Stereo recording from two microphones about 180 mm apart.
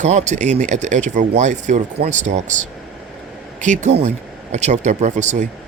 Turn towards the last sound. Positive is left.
turn(degrees=-40)  # may be behind; listen again after turning